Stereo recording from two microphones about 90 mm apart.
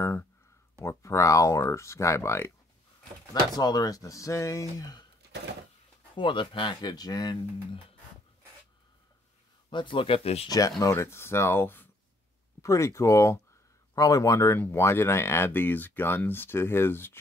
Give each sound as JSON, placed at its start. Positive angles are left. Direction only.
{"t": 0.0, "sound": "a sound", "side_deg": 30}
{"t": 0.8, "sound": "speech", "side_deg": 35}
{"t": 3.5, "sound": "speech", "side_deg": 45}
{"t": 6.1, "sound": "speech", "side_deg": 65}
{"t": 6.7, "sound": "speech", "side_deg": 50}
{"t": 9.7, "sound": "speech", "side_deg": 65}
{"t": 10.8, "sound": "speech", "side_deg": 30}
{"t": 12.6, "sound": "speech", "side_deg": 35}